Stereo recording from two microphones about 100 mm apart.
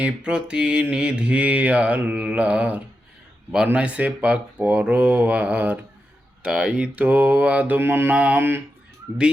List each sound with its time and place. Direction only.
0.0 s mantra: 10° right (ahead or behind)